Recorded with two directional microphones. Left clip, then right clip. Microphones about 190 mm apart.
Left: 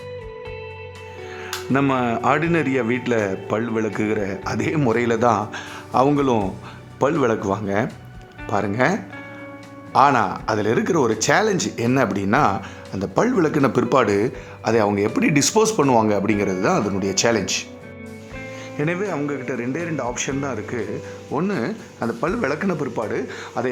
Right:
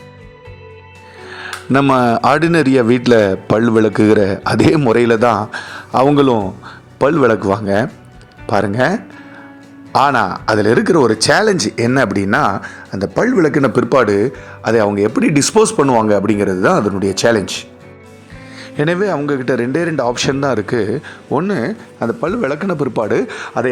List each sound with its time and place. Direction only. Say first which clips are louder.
1.3 s speech: right 7 dB; 30° right (ahead or behind)
18.8 s speech: right 8 dB; 25° right (ahead or behind)
23.0 s speech: right 9 dB; 30° right (ahead or behind)